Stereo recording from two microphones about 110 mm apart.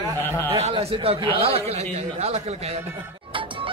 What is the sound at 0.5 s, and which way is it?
Speech, 65° right (ahead or behind).